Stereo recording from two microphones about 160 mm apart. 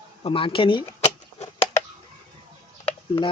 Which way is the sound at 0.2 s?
35° left (ahead or behind).